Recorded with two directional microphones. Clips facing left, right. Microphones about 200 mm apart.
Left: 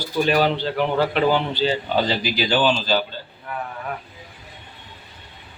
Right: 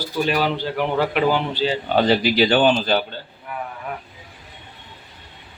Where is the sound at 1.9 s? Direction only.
60° right (ahead or behind).